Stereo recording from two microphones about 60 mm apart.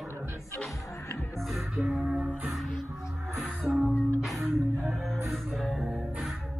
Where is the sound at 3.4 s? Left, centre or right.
Centre.